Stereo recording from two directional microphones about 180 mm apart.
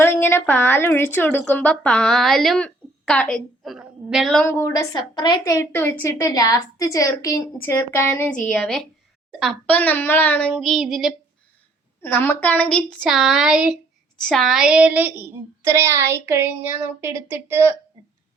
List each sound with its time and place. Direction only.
0.0 s a woman's voice: 10° left (ahead or behind)
4.6 s a woman's voice: 20° left (ahead or behind); by 8.9 s centre (ahead or behind)
9.4 s child singing: 5° left (ahead or behind)
12.0 s child singing: 10° left (ahead or behind); by 13.7 s 5° right (ahead or behind)
14.2 s a woman's voice: centre (ahead or behind); by 17.7 s 15° right (ahead or behind)